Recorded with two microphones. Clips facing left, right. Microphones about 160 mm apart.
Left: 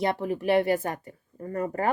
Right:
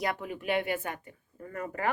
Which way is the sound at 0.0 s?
30° left (ahead or behind).